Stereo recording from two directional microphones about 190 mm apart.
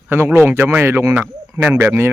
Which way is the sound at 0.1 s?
10° right (ahead or behind).